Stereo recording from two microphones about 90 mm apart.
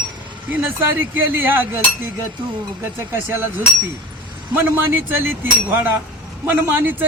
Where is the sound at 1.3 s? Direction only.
25° right (ahead or behind).